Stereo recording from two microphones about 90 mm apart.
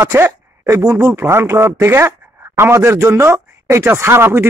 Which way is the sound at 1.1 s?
25° right (ahead or behind).